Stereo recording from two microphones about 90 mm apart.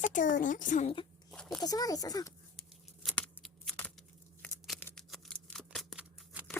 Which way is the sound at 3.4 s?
5° left (ahead or behind).